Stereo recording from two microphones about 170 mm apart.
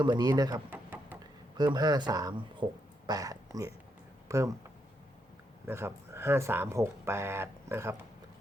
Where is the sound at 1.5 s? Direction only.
25° right (ahead or behind).